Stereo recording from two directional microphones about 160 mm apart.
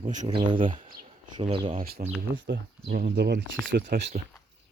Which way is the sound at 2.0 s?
65° right (ahead or behind).